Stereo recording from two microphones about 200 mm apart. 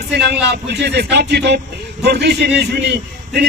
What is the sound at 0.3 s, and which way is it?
A man's voice, 55° right (ahead or behind).